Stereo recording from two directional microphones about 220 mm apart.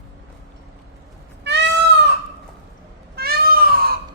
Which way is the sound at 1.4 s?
50° right (ahead or behind).